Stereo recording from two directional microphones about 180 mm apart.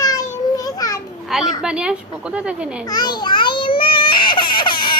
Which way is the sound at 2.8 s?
25° left (ahead or behind).